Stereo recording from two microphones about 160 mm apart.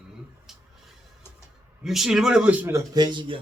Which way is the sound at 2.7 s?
25° right (ahead or behind).